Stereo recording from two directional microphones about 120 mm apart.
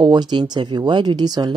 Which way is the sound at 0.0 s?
35° right (ahead or behind).